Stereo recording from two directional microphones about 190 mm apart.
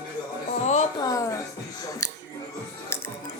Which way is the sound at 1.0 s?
15° left (ahead or behind).